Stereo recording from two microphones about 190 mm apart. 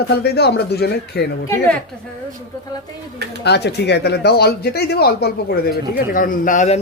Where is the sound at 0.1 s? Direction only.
60° left (ahead or behind).